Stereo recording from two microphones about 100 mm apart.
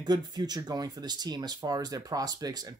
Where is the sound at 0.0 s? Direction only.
45° right (ahead or behind).